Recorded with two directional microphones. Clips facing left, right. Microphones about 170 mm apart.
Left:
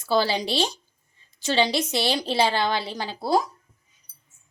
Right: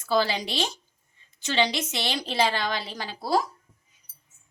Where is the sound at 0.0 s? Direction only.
30° left (ahead or behind).